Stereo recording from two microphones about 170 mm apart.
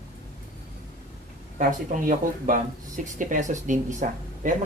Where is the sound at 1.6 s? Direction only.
50° right (ahead or behind).